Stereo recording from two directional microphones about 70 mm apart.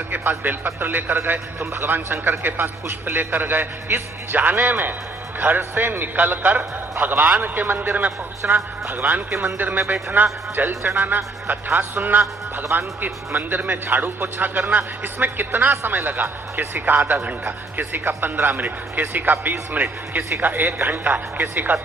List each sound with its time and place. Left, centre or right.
0.1 s a man's voice: right
9.3 s a man's voice: right
9.6 s a man's voice: right